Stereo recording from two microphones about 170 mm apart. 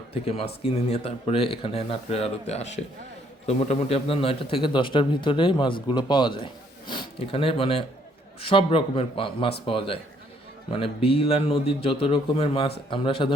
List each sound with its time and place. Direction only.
0.1 s a man's voice: 35° left (ahead or behind)